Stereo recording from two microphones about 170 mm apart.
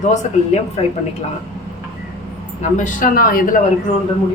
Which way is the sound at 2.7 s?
50° left (ahead or behind).